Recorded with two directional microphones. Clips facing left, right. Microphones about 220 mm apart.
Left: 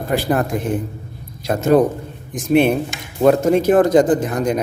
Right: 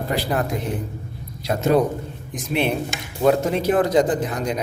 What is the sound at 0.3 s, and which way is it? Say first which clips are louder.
Speech: left 5 dB; 50° left (ahead or behind).